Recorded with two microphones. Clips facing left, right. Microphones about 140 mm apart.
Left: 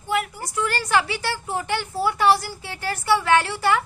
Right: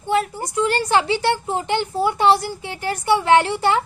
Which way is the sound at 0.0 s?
25° right (ahead or behind).